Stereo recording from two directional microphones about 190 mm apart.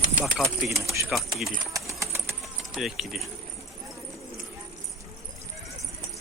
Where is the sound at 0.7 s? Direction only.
15° right (ahead or behind).